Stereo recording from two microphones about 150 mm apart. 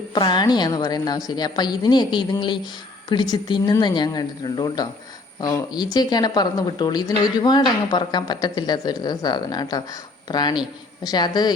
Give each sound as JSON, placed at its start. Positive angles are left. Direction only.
{"t": 0.1, "sound": "speech", "side_deg": 30}